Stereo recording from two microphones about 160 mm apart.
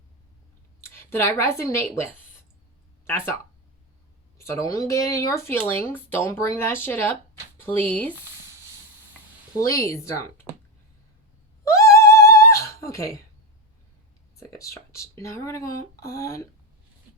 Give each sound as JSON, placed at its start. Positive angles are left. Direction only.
{"t": 0.8, "sound": "a sound", "side_deg": 15}
{"t": 1.6, "sound": "speech", "side_deg": 15}
{"t": 3.1, "sound": "speech", "side_deg": 15}
{"t": 4.4, "sound": "speech", "side_deg": 20}
{"t": 9.6, "sound": "speech", "side_deg": 20}
{"t": 11.6, "sound": "cat", "side_deg": 20}
{"t": 14.3, "sound": "speech", "side_deg": 20}